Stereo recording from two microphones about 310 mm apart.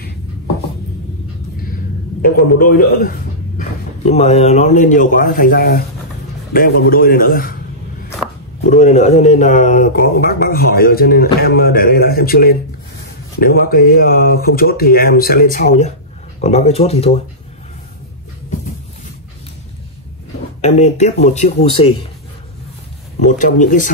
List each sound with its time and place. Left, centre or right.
2.2 s a man's voice: left
8.6 s speech: left
20.6 s speech: left
23.1 s speech: left